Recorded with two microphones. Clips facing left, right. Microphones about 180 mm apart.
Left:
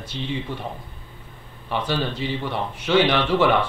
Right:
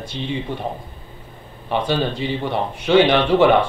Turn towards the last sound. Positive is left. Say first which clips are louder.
# right 5 dB
turn(degrees=-25)  # may be behind; listen again after turning